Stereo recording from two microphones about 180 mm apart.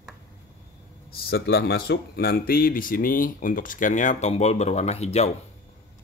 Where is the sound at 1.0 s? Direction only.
60° left (ahead or behind); by 5.3 s 35° left (ahead or behind).